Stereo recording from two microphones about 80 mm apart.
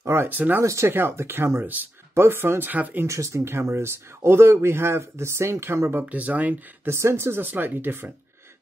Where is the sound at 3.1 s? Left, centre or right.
Right; by 6.9 s centre.